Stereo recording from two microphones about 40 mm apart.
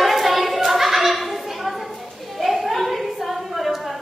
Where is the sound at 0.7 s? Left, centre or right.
Centre.